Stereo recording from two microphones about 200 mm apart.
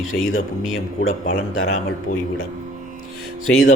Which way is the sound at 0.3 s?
90° left.